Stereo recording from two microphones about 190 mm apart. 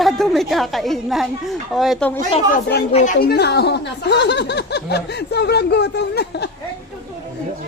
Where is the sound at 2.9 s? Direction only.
40° left (ahead or behind).